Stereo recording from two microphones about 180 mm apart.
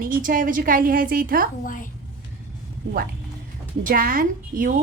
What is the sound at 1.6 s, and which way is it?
Speech, 50° left (ahead or behind).